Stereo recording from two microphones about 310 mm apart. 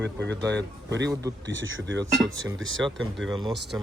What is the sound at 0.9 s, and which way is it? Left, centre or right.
Speech, right.